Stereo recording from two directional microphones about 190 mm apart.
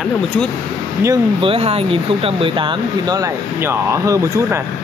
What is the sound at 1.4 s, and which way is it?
Speech, 30° right (ahead or behind).